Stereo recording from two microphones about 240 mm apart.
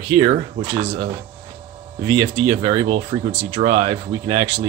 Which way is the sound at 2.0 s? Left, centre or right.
Centre.